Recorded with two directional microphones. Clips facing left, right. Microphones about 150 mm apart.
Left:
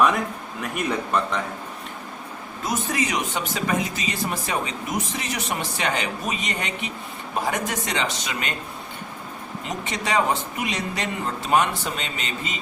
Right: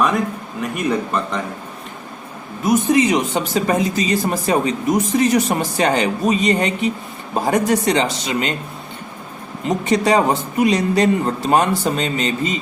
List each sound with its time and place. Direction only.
0.8 s speech: centre (ahead or behind)
2.6 s speech: 25° right (ahead or behind)
9.6 s speech: 35° right (ahead or behind)